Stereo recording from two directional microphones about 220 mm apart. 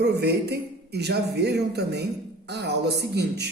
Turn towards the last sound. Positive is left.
turn(degrees=-50)  # may be behind; listen again after turning